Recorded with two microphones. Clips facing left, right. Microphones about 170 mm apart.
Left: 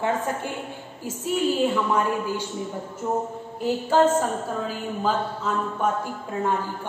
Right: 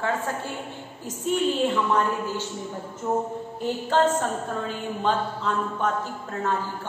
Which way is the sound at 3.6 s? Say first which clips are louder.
Left 3 dB; 10° left (ahead or behind).